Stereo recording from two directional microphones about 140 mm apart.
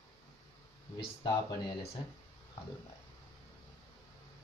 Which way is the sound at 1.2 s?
25° left (ahead or behind).